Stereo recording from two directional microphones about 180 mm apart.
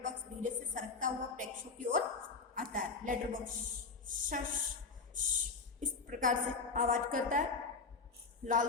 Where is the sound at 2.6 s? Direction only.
50° right (ahead or behind).